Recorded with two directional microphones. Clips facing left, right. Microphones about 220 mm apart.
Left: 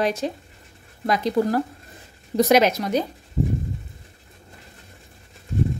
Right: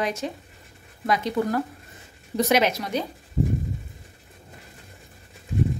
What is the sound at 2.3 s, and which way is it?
Speech, 40° left (ahead or behind).